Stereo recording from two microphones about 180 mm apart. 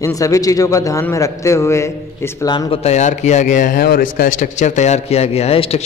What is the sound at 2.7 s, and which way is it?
A man's voice, 35° left (ahead or behind).